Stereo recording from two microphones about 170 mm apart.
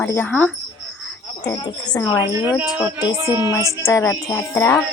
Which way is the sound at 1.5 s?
25° left (ahead or behind).